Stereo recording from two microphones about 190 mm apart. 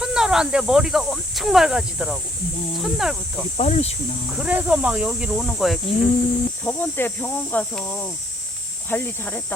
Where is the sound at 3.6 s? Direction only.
35° left (ahead or behind).